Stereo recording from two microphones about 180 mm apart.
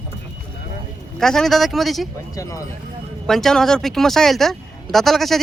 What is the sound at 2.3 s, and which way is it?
Speech, 15° left (ahead or behind).